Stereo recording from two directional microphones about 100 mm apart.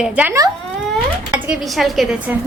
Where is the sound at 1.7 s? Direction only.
Centre (ahead or behind).